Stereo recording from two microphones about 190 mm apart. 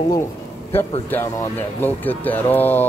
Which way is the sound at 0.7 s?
10° left (ahead or behind).